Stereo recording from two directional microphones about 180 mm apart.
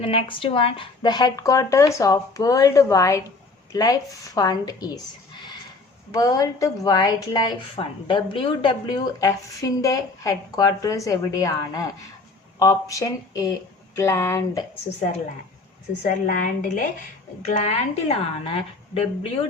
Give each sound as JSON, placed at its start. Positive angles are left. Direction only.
{"t": 0.0, "sound": "a woman's voice", "side_deg": 30}
{"t": 6.1, "sound": "a woman's voice", "side_deg": 20}
{"t": 16.0, "sound": "a woman's voice", "side_deg": 45}